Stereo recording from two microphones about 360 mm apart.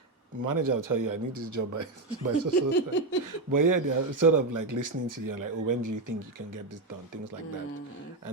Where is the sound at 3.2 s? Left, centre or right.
Right.